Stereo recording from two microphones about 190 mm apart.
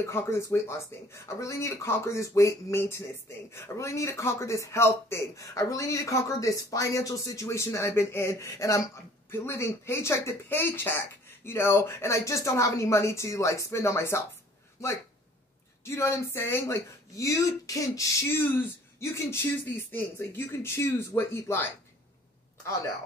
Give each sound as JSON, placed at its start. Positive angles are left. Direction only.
{"t": 0.0, "sound": "speech", "side_deg": 15}
{"t": 15.8, "sound": "speech", "side_deg": 15}